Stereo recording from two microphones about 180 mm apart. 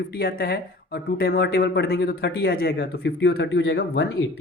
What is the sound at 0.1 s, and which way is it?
Speech, 60° left (ahead or behind).